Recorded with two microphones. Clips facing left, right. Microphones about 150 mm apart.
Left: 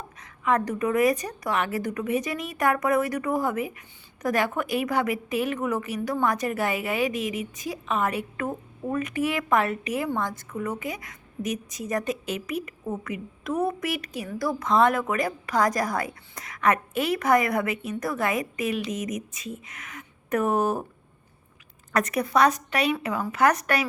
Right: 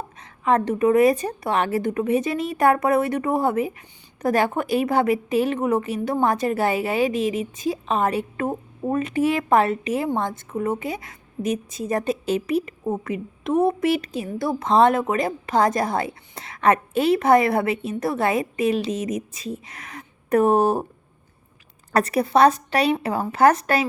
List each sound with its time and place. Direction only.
0.2 s a woman's voice: 30° right (ahead or behind)
21.9 s a woman's voice: 30° right (ahead or behind)